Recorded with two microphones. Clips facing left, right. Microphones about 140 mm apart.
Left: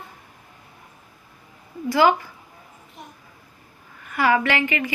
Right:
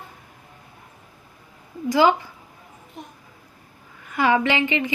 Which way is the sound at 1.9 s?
15° right (ahead or behind).